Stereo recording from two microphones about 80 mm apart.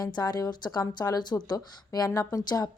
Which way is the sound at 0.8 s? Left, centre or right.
Left.